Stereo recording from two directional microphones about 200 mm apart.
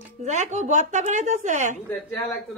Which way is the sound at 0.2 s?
35° right (ahead or behind).